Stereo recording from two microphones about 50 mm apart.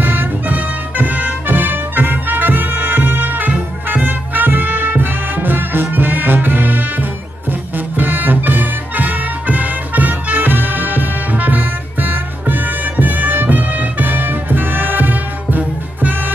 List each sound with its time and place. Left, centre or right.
0.0 s music: right